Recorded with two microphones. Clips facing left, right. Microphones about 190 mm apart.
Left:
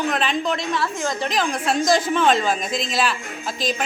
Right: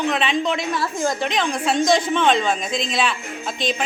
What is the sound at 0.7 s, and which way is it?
Speech, 10° right (ahead or behind).